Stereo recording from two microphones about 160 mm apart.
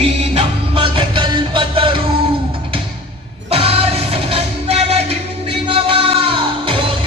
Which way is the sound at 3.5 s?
35° right (ahead or behind).